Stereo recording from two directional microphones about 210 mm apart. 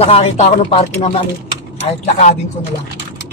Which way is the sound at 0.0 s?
30° left (ahead or behind).